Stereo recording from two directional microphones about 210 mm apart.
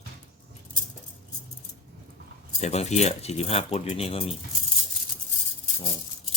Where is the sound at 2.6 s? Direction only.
30° left (ahead or behind).